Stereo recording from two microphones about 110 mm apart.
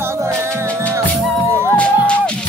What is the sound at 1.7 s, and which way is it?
Music, 10° left (ahead or behind).